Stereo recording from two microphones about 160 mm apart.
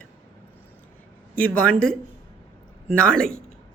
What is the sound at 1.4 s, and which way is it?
Speech, 5° left (ahead or behind).